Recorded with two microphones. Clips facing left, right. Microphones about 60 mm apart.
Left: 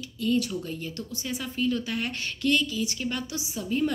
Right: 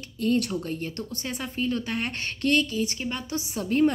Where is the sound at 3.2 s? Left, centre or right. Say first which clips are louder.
Right 3 dB; right.